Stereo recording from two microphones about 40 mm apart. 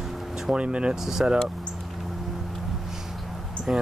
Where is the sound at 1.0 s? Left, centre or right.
Centre.